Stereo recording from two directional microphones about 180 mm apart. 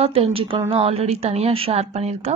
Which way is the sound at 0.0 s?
30° right (ahead or behind).